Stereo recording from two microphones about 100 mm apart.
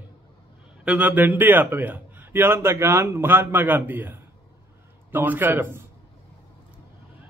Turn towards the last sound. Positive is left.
turn(degrees=-20)  # may be behind; listen again after turning